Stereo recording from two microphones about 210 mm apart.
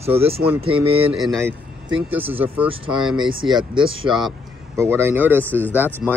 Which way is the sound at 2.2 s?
25° right (ahead or behind).